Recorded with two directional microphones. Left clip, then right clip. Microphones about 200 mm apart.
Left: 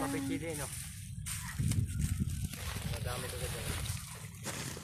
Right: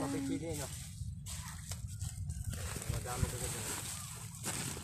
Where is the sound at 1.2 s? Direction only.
20° right (ahead or behind).